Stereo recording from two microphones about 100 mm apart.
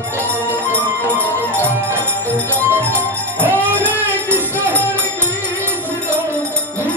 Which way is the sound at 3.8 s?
20° right (ahead or behind).